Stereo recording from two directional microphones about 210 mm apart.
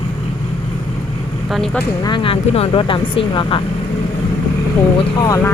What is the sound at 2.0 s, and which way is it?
Speech, 25° left (ahead or behind).